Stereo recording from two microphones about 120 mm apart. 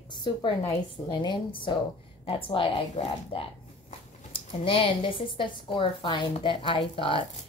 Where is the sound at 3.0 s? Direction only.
65° left (ahead or behind).